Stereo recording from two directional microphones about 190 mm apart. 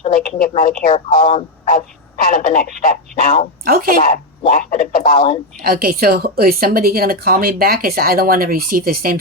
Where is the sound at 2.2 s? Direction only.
45° left (ahead or behind).